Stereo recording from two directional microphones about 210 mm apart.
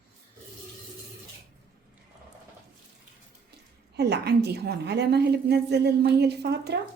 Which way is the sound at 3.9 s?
50° right (ahead or behind).